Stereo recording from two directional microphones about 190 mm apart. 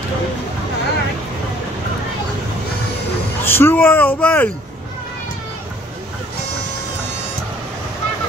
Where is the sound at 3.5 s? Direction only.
10° left (ahead or behind).